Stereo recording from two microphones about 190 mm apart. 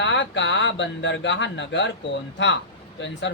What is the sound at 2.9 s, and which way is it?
Speech, 70° left (ahead or behind).